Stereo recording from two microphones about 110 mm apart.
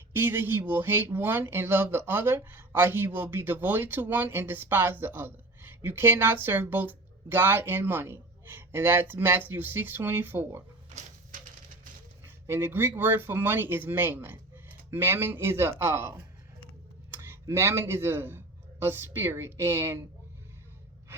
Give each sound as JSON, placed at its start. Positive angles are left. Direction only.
{"t": 0.1, "sound": "speech", "side_deg": -20}
{"t": 12.2, "sound": "speech", "side_deg": -20}
{"t": 17.4, "sound": "speech", "side_deg": -25}